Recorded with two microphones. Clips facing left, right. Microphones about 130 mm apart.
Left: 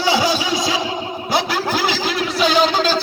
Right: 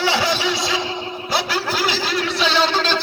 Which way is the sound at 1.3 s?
45° left (ahead or behind).